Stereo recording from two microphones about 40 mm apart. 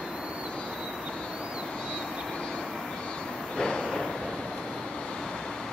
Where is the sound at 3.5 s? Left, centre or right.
Centre.